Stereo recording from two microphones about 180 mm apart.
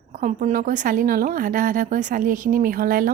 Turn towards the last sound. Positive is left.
turn(degrees=-50)  # may be behind; listen again after turning